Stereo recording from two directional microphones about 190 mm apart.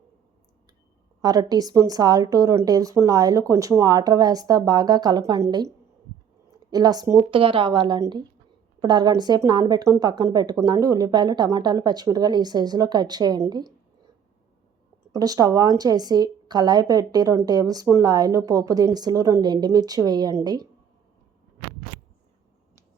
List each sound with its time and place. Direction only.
1.2 s a woman's voice: 20° right (ahead or behind)
15.1 s a woman's voice: 20° right (ahead or behind)